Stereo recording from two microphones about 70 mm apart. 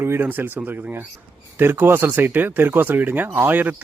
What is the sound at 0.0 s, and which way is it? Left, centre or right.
Speech, right.